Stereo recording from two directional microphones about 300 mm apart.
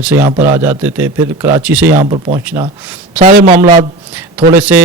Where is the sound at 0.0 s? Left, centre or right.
Centre.